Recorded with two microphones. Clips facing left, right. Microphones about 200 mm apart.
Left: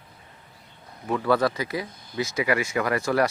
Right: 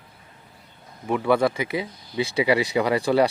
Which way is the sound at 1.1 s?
15° right (ahead or behind).